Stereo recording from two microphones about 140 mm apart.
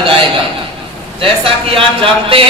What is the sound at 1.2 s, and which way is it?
A man's voice, 40° right (ahead or behind).